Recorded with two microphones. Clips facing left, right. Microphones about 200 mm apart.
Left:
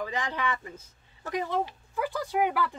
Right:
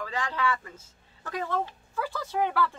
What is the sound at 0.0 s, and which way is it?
A woman's voice, 20° left (ahead or behind).